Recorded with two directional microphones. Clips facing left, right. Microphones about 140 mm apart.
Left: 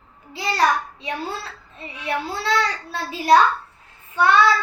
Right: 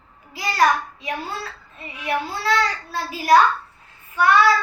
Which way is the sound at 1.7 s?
30° left (ahead or behind).